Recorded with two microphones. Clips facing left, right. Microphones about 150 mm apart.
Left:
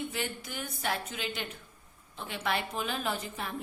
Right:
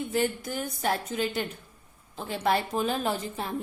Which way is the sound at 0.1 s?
40° right (ahead or behind).